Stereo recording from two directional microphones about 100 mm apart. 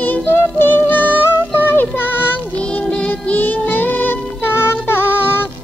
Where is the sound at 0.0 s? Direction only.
20° left (ahead or behind).